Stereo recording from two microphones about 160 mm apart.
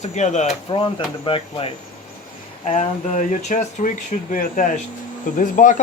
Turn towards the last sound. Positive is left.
turn(degrees=55)  # may be behind; listen again after turning